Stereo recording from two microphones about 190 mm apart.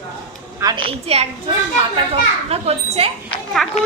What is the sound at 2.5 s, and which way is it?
Speech, 30° right (ahead or behind).